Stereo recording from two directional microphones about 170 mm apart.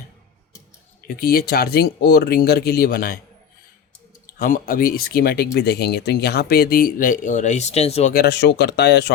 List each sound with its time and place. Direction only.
1.0 s speech: 65° left (ahead or behind)
4.4 s speech: 55° left (ahead or behind); by 8.1 s 40° left (ahead or behind)
8.1 s speech: 75° left (ahead or behind)